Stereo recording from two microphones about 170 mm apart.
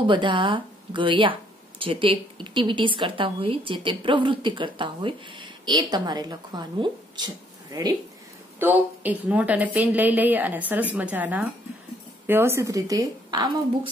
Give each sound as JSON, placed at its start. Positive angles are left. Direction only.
{"t": 0.0, "sound": "a woman's voice", "side_deg": -30}
{"t": 8.5, "sound": "a woman's voice", "side_deg": -10}